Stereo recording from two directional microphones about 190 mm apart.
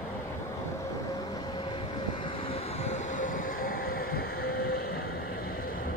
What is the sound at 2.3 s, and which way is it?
Train, 30° left (ahead or behind).